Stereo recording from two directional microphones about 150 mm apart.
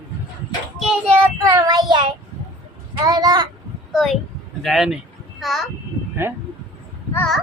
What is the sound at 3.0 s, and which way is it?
Speech, 25° right (ahead or behind).